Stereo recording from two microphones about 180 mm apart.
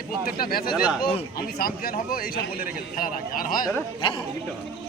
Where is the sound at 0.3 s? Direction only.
55° left (ahead or behind).